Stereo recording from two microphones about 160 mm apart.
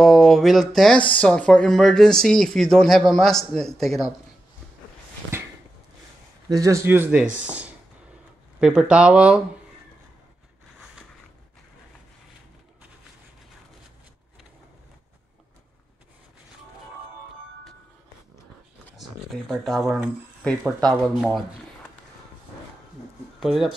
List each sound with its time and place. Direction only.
0.0 s speech: centre (ahead or behind)
5.3 s a sound: 15° right (ahead or behind)
6.5 s speech: 20° right (ahead or behind)
18.9 s speech: centre (ahead or behind)
23.4 s speech: centre (ahead or behind)